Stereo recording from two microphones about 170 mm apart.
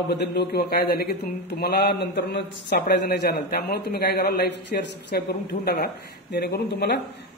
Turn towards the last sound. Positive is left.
turn(degrees=70)  # may be behind; listen again after turning